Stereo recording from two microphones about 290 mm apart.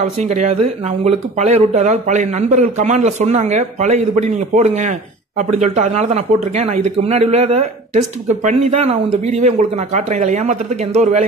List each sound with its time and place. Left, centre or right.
0.0 s a man's voice: right